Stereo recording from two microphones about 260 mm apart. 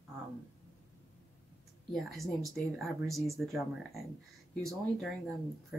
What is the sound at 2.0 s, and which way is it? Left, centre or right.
Speech, centre.